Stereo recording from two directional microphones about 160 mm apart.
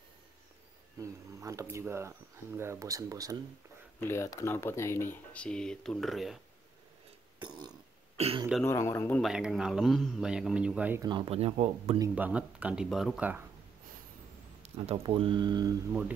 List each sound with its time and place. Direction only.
0.9 s speech: 20° right (ahead or behind)
4.0 s speech: 15° left (ahead or behind); by 6.4 s centre (ahead or behind)
7.3 s burping: 25° right (ahead or behind)
8.2 s speech: 35° right (ahead or behind)
8.6 s speech: 15° left (ahead or behind)
9.2 s a man's voice: centre (ahead or behind)
11.0 s speech: 30° right (ahead or behind)
12.2 s speech: 5° right (ahead or behind)
14.6 s speech: 35° right (ahead or behind)